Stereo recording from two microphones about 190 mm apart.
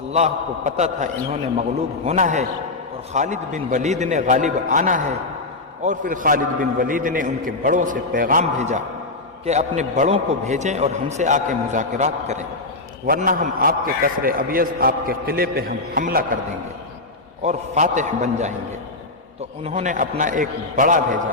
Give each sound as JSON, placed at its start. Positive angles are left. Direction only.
{"t": 0.1, "sound": "a man's voice", "side_deg": -35}
{"t": 17.4, "sound": "a man's voice", "side_deg": -40}
{"t": 19.6, "sound": "a man's voice", "side_deg": -40}